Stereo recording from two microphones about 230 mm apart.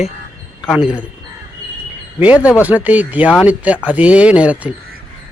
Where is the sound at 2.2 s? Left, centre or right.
Centre.